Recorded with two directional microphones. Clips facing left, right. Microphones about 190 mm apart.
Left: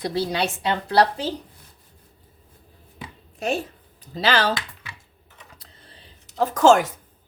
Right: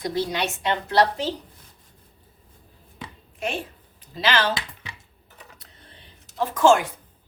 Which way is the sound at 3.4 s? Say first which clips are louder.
Left 4 dB; 40° left (ahead or behind).